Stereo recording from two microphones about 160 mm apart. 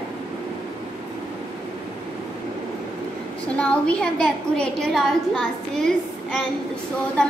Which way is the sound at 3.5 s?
5° left (ahead or behind).